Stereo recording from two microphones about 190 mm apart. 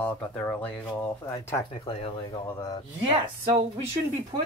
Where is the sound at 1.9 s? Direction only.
30° left (ahead or behind).